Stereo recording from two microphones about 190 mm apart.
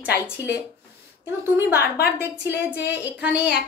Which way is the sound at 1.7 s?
55° left (ahead or behind).